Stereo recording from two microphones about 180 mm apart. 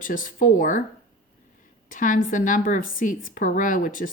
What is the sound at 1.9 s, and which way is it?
A woman's voice, 45° left (ahead or behind).